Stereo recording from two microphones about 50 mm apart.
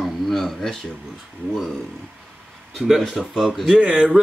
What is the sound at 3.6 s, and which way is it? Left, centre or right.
Speech, right.